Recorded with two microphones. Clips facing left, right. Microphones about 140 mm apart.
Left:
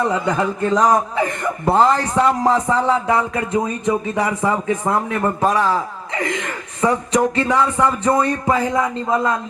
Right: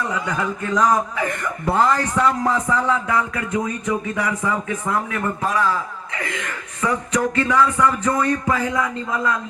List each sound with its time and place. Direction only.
0.0 s a man's voice: 30° left (ahead or behind)